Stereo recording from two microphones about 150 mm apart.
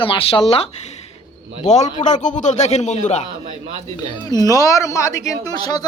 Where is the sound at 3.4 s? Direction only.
45° right (ahead or behind).